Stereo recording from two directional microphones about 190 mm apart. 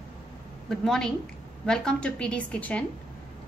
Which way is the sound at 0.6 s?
Centre (ahead or behind).